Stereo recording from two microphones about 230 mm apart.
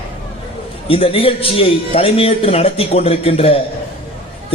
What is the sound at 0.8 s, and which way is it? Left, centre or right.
A man's voice, left.